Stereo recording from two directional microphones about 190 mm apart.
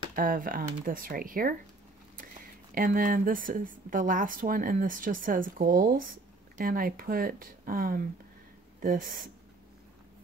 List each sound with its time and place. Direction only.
0.1 s speech: 45° right (ahead or behind)